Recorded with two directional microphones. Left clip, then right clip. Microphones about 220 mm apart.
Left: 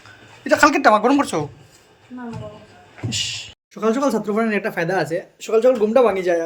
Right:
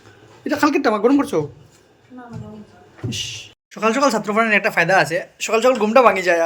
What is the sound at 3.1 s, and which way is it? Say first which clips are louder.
Speech: left 3 dB; 10° right (ahead or behind).